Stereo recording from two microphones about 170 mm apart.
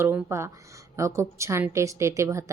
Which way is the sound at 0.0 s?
15° right (ahead or behind).